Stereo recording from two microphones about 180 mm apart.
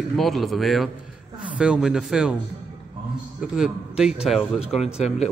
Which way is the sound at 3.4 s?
5° right (ahead or behind).